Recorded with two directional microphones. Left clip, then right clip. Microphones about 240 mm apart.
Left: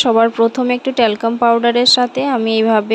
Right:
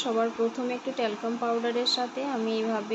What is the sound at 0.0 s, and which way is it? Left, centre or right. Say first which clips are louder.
Speech: left 15 dB; left.